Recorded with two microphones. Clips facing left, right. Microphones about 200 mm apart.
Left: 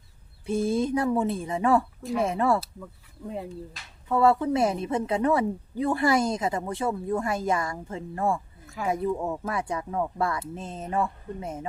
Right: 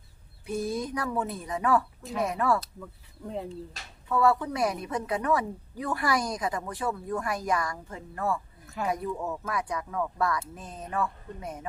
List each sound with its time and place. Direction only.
0.4 s speech: 25° left (ahead or behind)
2.6 s speech: 5° left (ahead or behind)
4.1 s speech: 25° left (ahead or behind)
8.6 s a sound: centre (ahead or behind)
8.9 s speech: 25° left (ahead or behind)